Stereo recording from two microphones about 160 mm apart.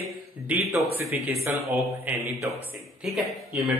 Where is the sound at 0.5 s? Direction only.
10° right (ahead or behind).